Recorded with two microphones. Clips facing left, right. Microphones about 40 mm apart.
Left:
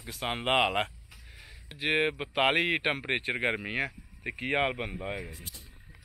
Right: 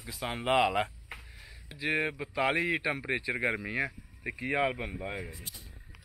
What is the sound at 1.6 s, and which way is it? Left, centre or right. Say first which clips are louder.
Speech: left 3 dB; left.